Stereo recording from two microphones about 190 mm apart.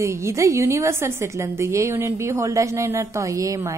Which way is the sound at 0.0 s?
15° right (ahead or behind).